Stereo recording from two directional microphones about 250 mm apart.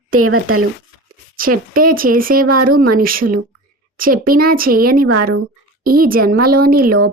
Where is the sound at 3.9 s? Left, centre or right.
Right.